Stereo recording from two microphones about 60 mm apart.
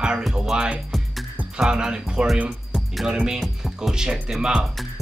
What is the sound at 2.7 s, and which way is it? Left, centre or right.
Music, centre.